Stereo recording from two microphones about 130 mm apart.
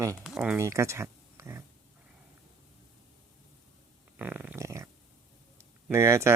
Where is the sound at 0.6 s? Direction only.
20° right (ahead or behind).